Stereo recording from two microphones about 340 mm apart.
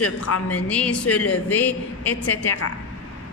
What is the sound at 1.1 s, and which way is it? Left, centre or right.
Speech, left.